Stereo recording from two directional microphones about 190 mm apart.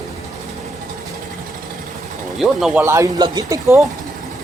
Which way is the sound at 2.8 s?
15° right (ahead or behind).